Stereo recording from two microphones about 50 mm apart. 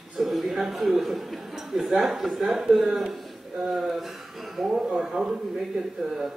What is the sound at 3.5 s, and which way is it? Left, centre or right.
Speech, centre.